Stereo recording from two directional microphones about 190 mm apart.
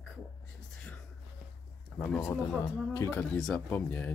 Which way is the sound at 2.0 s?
5° left (ahead or behind).